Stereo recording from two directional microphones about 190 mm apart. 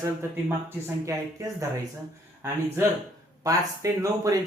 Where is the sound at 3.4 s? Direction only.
20° right (ahead or behind).